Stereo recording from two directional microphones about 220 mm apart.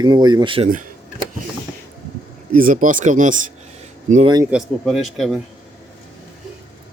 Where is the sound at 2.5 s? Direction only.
40° right (ahead or behind).